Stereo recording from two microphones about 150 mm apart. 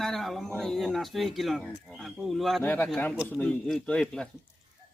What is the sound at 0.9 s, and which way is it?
A man's voice, centre (ahead or behind).